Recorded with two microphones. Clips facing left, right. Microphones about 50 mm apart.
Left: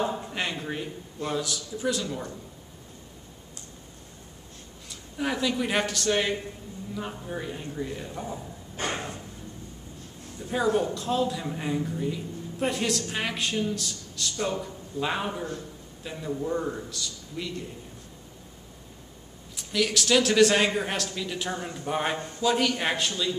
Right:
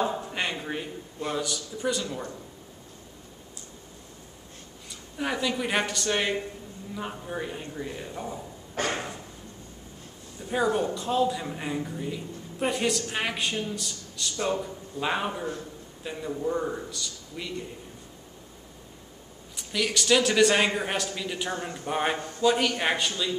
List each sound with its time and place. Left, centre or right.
0.0 s a man's voice: centre
5.1 s a woman's voice: centre
8.8 s a sound: right
10.4 s a man's voice: centre
19.5 s a man's voice: centre